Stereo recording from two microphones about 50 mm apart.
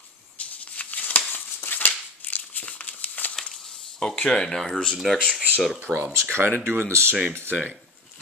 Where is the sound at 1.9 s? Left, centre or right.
Left.